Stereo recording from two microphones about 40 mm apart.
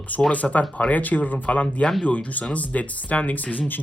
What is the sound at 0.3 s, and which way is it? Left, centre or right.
Speech, left.